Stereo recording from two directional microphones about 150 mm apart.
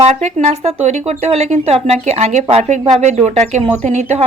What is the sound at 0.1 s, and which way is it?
Speech, 50° right (ahead or behind).